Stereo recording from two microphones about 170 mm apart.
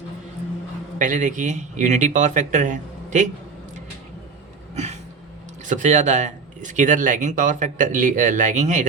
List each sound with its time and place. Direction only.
0.9 s speech: 50° right (ahead or behind)
4.7 s a sound: 40° right (ahead or behind)
5.6 s speech: 45° right (ahead or behind)